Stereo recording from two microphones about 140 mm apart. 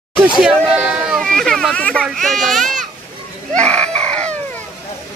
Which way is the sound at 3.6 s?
55° right (ahead or behind).